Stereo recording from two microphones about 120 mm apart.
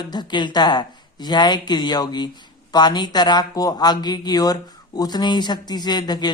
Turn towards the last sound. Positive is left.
turn(degrees=35)  # may be behind; listen again after turning